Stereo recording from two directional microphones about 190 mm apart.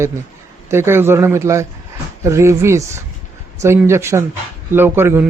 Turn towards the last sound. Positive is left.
turn(degrees=-10)  # may be behind; listen again after turning